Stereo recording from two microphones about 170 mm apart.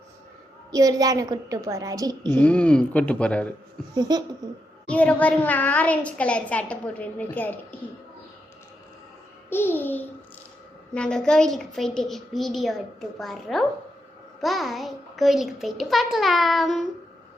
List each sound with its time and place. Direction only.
0.7 s a woman's voice: 20° right (ahead or behind)
2.3 s a child's voice: 5° left (ahead or behind)
3.9 s a woman's voice: 25° right (ahead or behind)
4.9 s a child's voice: 10° left (ahead or behind)
9.5 s a child's voice: 15° left (ahead or behind)